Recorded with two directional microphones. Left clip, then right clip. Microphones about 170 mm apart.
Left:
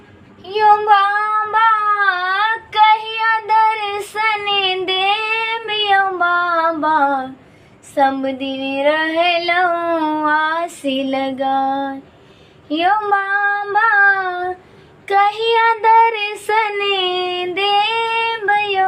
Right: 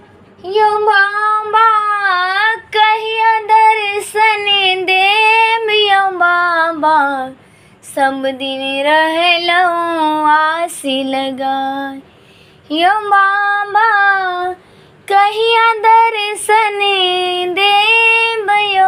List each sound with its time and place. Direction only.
0.4 s female singing: centre (ahead or behind)
1.5 s child singing: 15° right (ahead or behind)
7.9 s female singing: 5° right (ahead or behind)
12.6 s child singing: 10° right (ahead or behind)